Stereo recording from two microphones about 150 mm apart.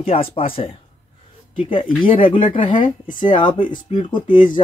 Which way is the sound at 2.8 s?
60° left (ahead or behind).